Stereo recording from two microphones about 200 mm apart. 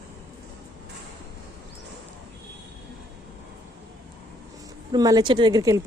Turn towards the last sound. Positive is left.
turn(degrees=-15)  # may be behind; listen again after turning